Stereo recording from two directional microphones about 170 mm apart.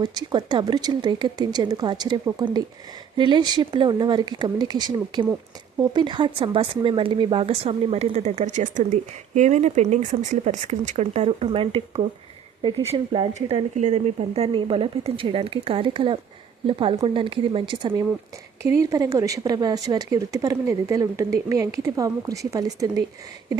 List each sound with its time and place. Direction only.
0.0 s speech: 25° right (ahead or behind)
18.6 s speech: 20° right (ahead or behind)